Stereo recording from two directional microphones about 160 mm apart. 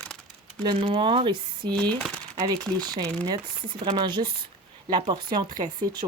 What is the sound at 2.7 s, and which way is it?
A woman's voice, 25° right (ahead or behind).